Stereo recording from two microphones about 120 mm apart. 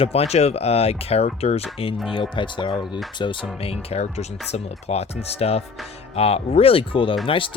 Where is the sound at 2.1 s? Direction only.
45° left (ahead or behind).